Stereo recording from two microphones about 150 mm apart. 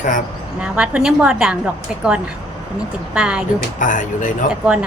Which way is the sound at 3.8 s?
60° left (ahead or behind).